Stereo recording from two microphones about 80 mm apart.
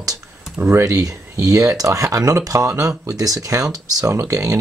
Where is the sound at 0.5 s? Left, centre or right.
Right.